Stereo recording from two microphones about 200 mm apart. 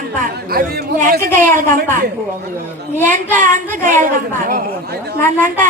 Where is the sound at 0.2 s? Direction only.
50° right (ahead or behind).